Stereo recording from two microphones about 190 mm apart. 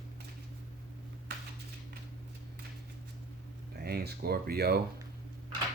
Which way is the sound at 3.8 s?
55° right (ahead or behind).